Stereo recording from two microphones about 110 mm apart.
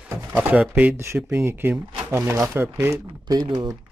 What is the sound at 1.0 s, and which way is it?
Speech, 25° right (ahead or behind).